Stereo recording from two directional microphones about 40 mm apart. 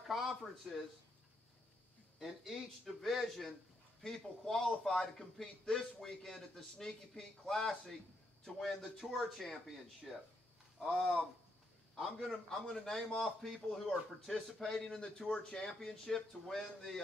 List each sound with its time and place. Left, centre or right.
0.0 s speech: centre
2.1 s speech: centre
10.1 s speech: centre
12.7 s speech: centre